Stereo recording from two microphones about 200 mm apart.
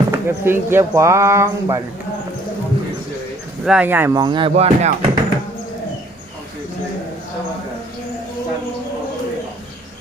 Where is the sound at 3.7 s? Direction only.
5° right (ahead or behind); by 4.9 s 35° right (ahead or behind).